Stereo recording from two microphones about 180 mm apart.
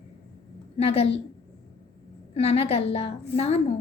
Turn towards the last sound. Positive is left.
turn(degrees=35)  # may be behind; listen again after turning